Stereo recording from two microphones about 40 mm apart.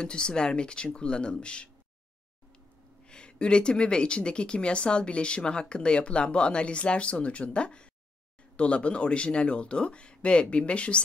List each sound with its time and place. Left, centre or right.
0.0 s speech: left
3.1 s speech: left